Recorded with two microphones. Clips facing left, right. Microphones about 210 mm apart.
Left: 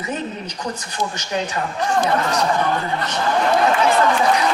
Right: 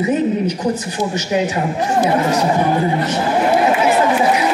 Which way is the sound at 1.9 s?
10° right (ahead or behind).